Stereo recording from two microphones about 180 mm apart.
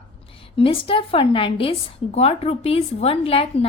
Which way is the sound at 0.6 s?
30° left (ahead or behind).